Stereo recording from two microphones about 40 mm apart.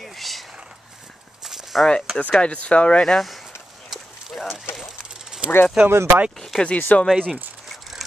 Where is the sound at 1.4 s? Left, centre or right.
Centre.